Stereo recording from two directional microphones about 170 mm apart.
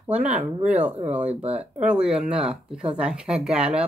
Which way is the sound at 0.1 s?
10° right (ahead or behind).